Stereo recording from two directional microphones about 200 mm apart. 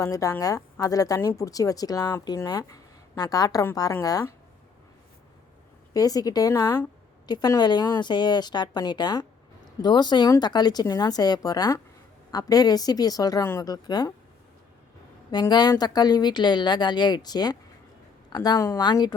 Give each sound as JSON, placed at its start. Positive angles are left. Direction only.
{"t": 0.0, "sound": "a woman's voice", "side_deg": 15}
{"t": 5.9, "sound": "a woman's voice", "side_deg": 20}
{"t": 15.3, "sound": "a woman's voice", "side_deg": 20}